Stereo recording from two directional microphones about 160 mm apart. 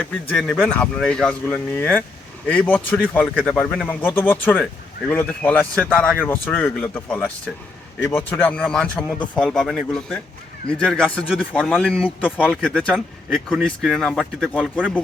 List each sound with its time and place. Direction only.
0.0 s speech: 5° left (ahead or behind)